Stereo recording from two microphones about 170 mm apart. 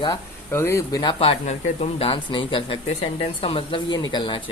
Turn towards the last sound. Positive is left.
turn(degrees=30)  # may be behind; listen again after turning